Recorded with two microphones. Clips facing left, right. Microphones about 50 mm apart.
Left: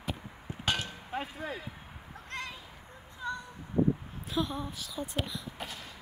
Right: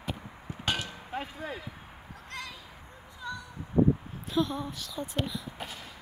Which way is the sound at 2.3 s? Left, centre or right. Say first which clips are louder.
Left 1 dB; left.